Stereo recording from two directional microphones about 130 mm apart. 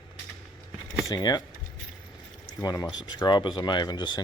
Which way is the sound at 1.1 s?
30° left (ahead or behind).